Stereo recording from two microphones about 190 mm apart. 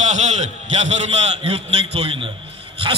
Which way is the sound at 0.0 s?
35° right (ahead or behind).